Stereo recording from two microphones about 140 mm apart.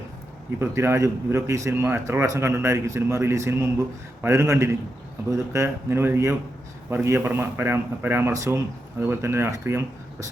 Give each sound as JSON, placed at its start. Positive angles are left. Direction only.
{"t": 0.6, "sound": "a man's voice", "side_deg": -20}